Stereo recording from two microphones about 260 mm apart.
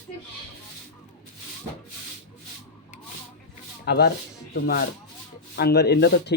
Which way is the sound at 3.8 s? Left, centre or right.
Left.